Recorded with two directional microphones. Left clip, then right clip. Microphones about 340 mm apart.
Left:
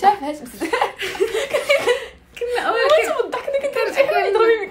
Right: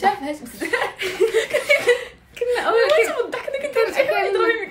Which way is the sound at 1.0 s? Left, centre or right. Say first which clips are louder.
Right 2 dB; centre.